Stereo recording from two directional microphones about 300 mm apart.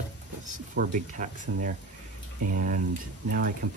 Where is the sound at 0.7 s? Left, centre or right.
Right.